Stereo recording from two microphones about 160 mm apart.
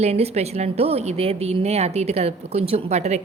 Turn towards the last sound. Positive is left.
turn(degrees=-45)  # may be behind; listen again after turning